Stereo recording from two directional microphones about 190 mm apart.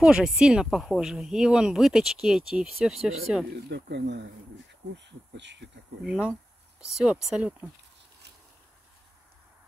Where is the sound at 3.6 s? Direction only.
60° right (ahead or behind).